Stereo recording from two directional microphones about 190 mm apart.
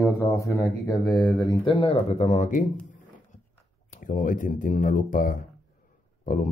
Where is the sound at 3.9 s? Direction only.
45° left (ahead or behind).